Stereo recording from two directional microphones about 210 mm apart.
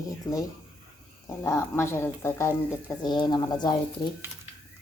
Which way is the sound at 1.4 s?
10° left (ahead or behind).